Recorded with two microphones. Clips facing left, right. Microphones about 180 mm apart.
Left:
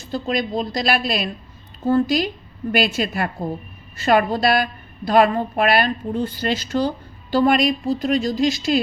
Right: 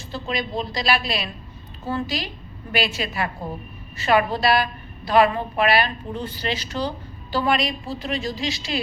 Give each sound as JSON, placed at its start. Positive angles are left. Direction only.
{"t": 0.1, "sound": "a woman's voice", "side_deg": 45}